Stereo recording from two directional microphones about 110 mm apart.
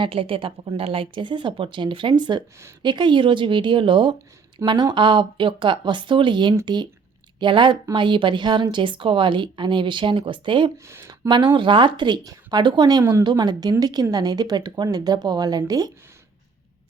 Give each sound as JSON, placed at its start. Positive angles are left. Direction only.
{"t": 0.0, "sound": "a woman's voice", "side_deg": -55}
{"t": 10.8, "sound": "speech", "side_deg": -25}
{"t": 11.3, "sound": "a woman's voice", "side_deg": -45}